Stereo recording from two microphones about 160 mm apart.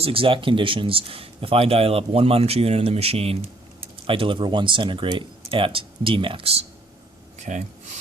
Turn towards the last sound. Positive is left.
turn(degrees=-50)  # may be behind; listen again after turning